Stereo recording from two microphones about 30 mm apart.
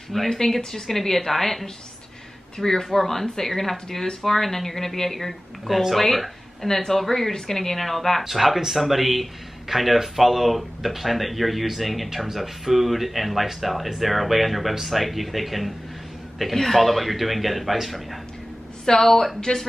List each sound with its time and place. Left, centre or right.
0.1 s speech: centre
0.6 s speech: centre
2.5 s speech: centre
5.7 s speech: centre
5.9 s speech: centre
8.2 s speech: centre
18.9 s speech: centre